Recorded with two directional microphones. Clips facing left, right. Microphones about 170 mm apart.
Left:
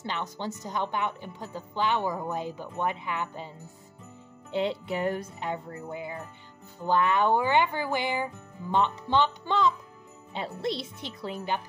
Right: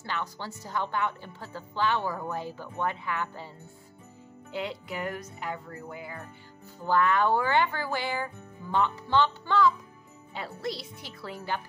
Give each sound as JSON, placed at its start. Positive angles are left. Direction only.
{"t": 0.0, "sound": "a woman's voice", "side_deg": 20}